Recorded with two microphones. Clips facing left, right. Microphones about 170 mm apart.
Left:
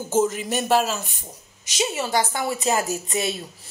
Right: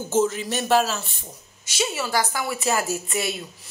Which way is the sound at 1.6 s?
15° left (ahead or behind).